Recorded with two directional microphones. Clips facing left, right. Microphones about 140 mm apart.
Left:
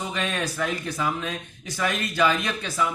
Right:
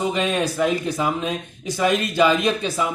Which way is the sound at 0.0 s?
20° right (ahead or behind).